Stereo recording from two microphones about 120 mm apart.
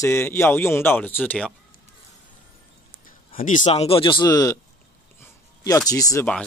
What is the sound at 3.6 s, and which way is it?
Speech, 50° left (ahead or behind).